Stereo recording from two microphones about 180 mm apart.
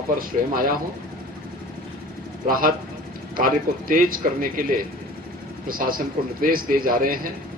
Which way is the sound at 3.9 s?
50° right (ahead or behind).